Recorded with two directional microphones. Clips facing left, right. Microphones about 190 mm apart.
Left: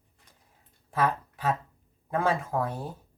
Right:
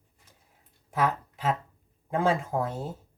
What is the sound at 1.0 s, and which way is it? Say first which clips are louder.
Speech: even; 20° right (ahead or behind).